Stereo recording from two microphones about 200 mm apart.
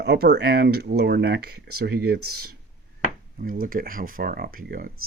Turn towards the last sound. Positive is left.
turn(degrees=-45)  # may be behind; listen again after turning